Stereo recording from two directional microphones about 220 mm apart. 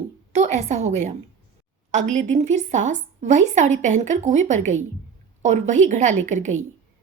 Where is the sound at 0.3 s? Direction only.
30° right (ahead or behind).